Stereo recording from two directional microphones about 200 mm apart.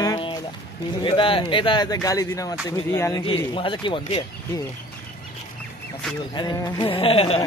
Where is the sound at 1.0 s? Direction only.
25° left (ahead or behind).